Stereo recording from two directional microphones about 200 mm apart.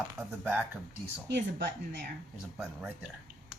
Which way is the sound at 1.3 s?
60° right (ahead or behind).